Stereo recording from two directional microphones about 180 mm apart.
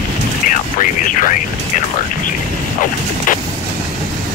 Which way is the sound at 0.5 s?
45° left (ahead or behind).